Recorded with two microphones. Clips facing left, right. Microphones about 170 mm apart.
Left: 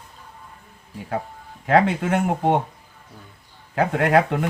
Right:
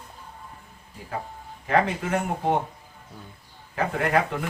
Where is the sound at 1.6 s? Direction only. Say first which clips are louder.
Left 5 dB; 75° left (ahead or behind).